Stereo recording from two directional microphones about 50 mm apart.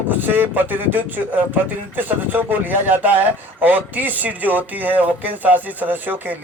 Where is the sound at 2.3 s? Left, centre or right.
Right.